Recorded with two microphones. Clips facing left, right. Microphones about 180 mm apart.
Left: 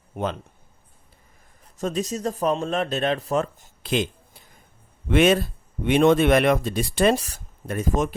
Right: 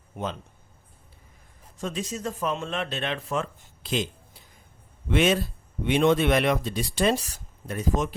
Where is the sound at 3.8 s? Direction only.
60° left (ahead or behind).